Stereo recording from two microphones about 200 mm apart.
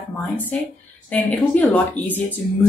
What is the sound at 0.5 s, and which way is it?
Speech, 5° left (ahead or behind).